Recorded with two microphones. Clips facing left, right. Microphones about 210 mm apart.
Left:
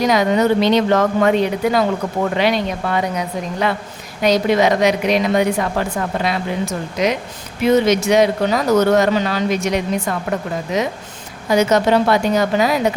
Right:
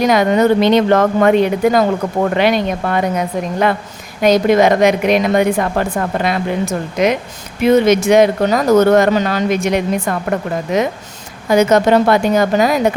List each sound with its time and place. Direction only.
0.0 s a woman's voice: 55° right (ahead or behind)
11.5 s a woman's voice: 50° right (ahead or behind)